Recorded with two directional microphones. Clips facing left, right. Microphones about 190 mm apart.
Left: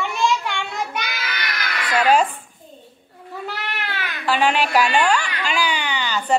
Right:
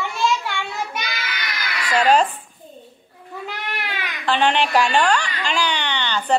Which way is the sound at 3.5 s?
15° right (ahead or behind).